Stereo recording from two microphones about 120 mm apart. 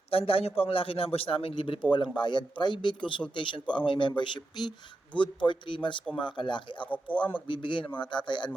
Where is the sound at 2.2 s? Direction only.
40° left (ahead or behind).